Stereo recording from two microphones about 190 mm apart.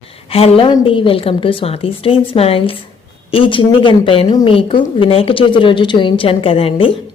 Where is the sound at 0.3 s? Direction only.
30° left (ahead or behind).